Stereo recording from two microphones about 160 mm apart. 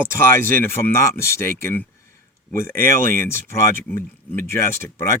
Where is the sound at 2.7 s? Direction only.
60° right (ahead or behind).